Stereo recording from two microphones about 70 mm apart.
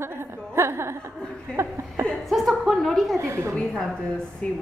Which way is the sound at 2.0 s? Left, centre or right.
Centre.